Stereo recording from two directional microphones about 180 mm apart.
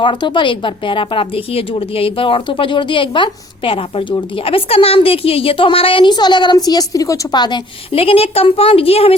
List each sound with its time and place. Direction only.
0.0 s speech: 25° left (ahead or behind)